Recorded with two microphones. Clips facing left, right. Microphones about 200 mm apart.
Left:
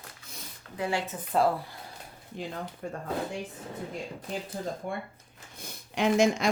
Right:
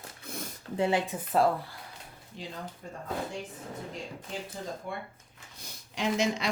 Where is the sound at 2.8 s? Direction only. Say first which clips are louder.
Left 7 dB; 65° left (ahead or behind).